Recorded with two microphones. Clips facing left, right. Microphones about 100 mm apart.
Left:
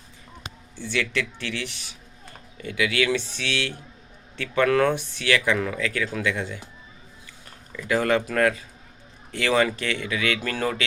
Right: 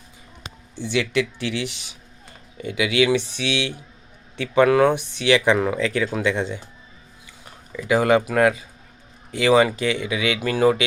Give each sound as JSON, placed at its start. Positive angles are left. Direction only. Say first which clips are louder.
{"t": 0.8, "sound": "speech", "louder": "right 5 dB", "side_deg": -15}
{"t": 7.4, "sound": "speech", "louder": "right 5 dB", "side_deg": -15}